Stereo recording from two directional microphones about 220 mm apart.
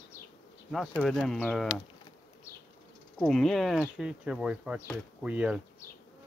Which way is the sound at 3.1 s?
5° left (ahead or behind).